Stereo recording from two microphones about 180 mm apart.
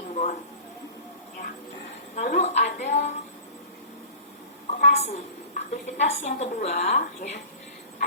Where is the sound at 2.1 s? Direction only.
40° left (ahead or behind).